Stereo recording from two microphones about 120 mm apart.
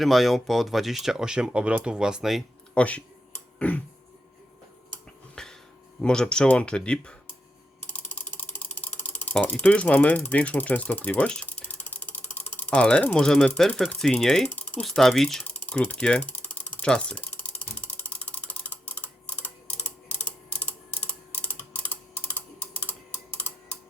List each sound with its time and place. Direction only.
0.0 s speech: centre (ahead or behind)
2.7 s speech: 10° left (ahead or behind)
5.3 s a sound: 5° left (ahead or behind)
6.0 s speech: 5° left (ahead or behind)
7.9 s ratchet: 15° left (ahead or behind)
13.6 s speech: centre (ahead or behind)
15.4 s ratchet: 15° left (ahead or behind)
18.3 s typing: 15° left (ahead or behind)
21.4 s typing: 15° left (ahead or behind)